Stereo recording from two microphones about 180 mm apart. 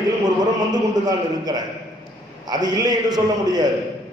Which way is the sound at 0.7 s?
20° right (ahead or behind).